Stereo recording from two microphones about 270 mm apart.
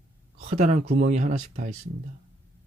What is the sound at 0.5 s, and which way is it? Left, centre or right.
Speech, right.